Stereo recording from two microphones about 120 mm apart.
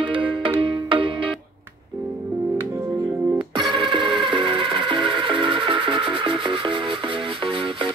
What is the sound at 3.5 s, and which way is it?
Music, 40° right (ahead or behind).